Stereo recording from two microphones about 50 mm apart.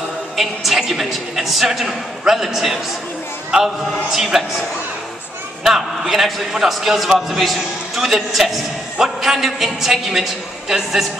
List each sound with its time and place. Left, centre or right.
0.4 s a man's voice: centre
5.6 s a man's voice: centre